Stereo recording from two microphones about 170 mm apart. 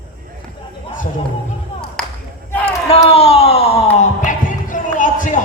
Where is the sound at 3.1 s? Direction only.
35° left (ahead or behind).